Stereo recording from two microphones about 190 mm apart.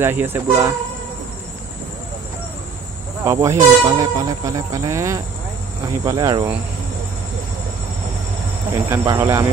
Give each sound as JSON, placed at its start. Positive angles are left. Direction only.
{"t": 0.0, "sound": "speech", "side_deg": -10}
{"t": 3.3, "sound": "speech", "side_deg": -15}
{"t": 8.7, "sound": "speech", "side_deg": -15}